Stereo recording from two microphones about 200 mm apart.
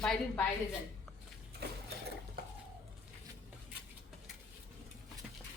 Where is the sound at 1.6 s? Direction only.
55° right (ahead or behind).